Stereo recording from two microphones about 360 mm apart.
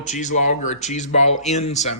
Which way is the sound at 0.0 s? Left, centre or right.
Centre.